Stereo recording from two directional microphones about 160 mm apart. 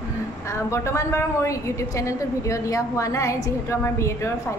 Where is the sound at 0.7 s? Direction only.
20° left (ahead or behind).